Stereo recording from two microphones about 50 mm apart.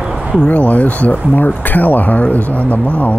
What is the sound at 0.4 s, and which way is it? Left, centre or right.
Speech, left.